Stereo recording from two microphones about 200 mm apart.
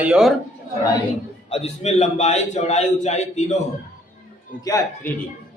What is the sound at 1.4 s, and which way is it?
A man's voice, 30° left (ahead or behind).